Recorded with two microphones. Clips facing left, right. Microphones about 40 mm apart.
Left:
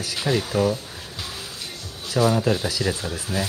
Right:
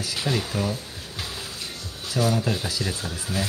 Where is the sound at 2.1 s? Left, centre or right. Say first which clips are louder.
Left 4 dB; left.